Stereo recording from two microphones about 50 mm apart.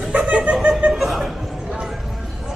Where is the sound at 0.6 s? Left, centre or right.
Right.